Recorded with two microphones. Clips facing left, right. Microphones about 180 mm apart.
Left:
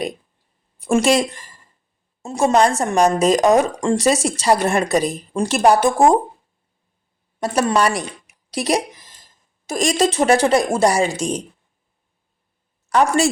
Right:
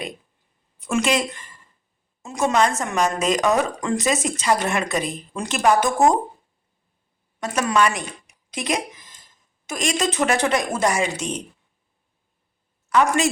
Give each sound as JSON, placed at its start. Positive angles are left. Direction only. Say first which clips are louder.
{"t": 0.8, "sound": "speech", "louder": "left 5 dB", "side_deg": 35}
{"t": 7.3, "sound": "speech", "louder": "left 3 dB", "side_deg": 35}